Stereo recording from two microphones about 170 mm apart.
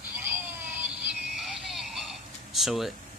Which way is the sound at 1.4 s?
Centre (ahead or behind).